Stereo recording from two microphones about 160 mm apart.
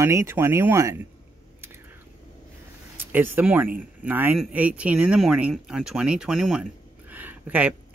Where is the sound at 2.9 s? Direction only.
10° right (ahead or behind).